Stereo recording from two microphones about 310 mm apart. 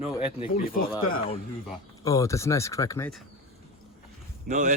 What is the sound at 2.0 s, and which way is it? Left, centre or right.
Speech, centre.